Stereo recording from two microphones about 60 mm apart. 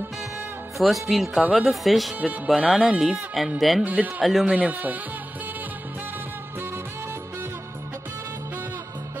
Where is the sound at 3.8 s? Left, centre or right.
Right.